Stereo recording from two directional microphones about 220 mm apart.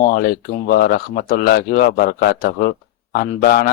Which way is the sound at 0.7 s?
45° left (ahead or behind).